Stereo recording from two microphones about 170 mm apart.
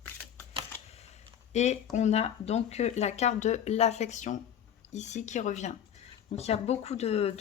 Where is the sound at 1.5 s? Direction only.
40° left (ahead or behind).